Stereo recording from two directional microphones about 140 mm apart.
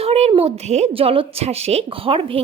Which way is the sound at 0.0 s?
45° right (ahead or behind).